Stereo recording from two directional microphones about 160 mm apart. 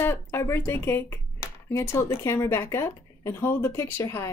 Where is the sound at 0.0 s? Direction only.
15° left (ahead or behind).